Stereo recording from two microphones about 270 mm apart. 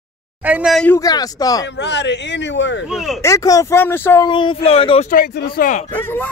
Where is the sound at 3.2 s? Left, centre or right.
Centre; by 5.8 s left.